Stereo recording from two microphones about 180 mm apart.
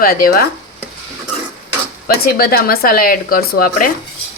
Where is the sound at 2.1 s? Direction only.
60° left (ahead or behind).